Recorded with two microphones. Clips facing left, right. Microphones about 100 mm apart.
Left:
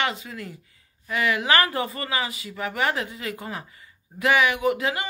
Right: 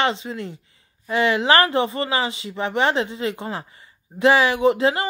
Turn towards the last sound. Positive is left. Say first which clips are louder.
# right 6 dB
turn(degrees=-30)  # may be behind; listen again after turning